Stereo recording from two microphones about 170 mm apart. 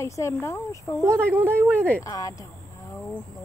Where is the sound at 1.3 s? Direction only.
10° right (ahead or behind).